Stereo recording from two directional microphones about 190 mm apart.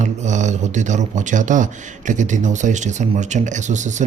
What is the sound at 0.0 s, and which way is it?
A man's voice, 40° right (ahead or behind).